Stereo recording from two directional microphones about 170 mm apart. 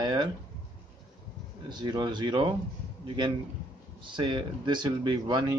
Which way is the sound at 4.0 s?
25° right (ahead or behind).